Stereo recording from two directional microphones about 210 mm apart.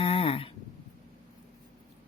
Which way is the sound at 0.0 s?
25° left (ahead or behind).